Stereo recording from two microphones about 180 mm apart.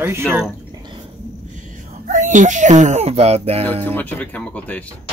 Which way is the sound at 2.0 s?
45° right (ahead or behind).